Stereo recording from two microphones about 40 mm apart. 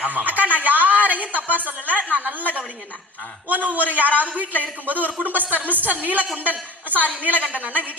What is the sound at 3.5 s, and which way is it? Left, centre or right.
A woman's voice, right.